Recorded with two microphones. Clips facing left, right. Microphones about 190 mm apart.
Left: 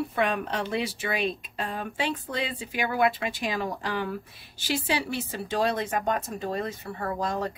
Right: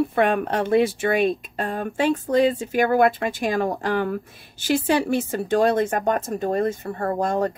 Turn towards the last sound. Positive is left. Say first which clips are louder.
# right 7 dB
turn(degrees=-50)  # may be behind; listen again after turning